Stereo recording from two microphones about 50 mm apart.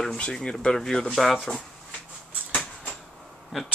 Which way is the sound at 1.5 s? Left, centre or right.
Left.